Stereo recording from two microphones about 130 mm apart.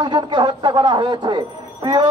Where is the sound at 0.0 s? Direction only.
35° right (ahead or behind).